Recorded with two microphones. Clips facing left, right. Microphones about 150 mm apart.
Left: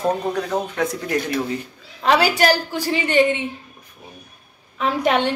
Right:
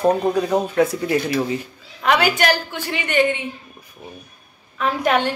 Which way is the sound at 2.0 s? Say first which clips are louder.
Left 1 dB; 30° left (ahead or behind).